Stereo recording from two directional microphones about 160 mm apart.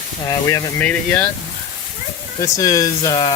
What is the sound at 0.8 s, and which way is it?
Speech, 10° left (ahead or behind).